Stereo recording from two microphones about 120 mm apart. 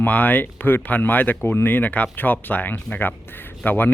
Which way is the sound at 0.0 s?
15° left (ahead or behind).